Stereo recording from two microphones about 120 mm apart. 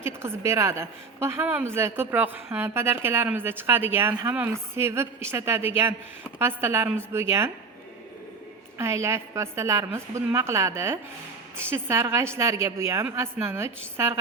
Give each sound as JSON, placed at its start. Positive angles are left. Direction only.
{"t": 0.0, "sound": "a woman's voice", "side_deg": -20}
{"t": 8.8, "sound": "a woman's voice", "side_deg": -25}